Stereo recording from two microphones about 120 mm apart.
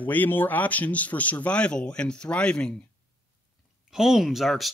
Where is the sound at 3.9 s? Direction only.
5° right (ahead or behind).